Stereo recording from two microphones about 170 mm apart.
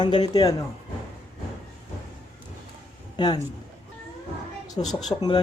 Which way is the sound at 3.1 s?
25° left (ahead or behind).